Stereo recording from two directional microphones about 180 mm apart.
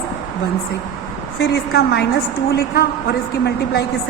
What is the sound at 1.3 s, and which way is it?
A woman's voice, 65° left (ahead or behind).